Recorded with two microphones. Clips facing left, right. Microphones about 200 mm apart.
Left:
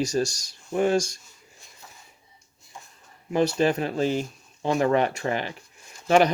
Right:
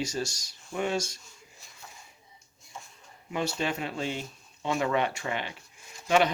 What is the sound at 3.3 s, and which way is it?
Speech, 40° left (ahead or behind).